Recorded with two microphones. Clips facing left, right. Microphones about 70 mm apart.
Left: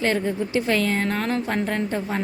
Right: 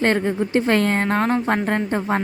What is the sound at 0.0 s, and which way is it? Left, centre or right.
Speech, right.